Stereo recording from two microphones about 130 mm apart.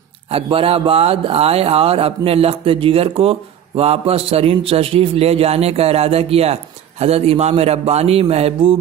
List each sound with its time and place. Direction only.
0.3 s speech: 45° right (ahead or behind)